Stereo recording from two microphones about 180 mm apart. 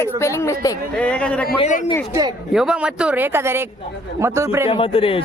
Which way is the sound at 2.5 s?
5° right (ahead or behind).